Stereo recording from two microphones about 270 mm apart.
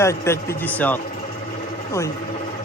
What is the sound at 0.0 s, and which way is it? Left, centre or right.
Speech, centre.